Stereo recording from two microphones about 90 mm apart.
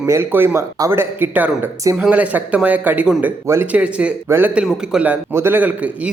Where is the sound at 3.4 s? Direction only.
30° right (ahead or behind).